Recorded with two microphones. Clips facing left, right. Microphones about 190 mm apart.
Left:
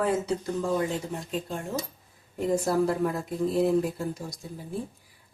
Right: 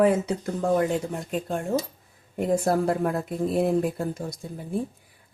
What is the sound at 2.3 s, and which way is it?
Speech, 55° right (ahead or behind).